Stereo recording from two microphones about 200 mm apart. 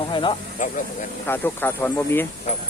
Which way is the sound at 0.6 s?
40° left (ahead or behind).